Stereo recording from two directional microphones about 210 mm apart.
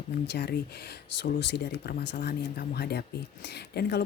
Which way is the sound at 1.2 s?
55° left (ahead or behind).